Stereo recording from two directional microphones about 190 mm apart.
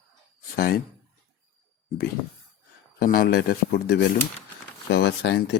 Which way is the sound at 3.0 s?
50° left (ahead or behind).